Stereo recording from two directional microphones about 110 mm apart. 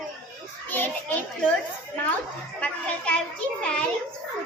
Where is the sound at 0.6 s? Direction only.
15° left (ahead or behind).